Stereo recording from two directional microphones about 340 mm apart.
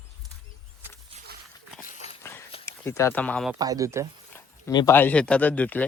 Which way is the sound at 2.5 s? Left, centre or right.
Centre.